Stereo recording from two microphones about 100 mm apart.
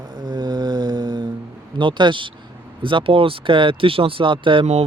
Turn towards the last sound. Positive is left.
turn(degrees=-75)  # may be behind; listen again after turning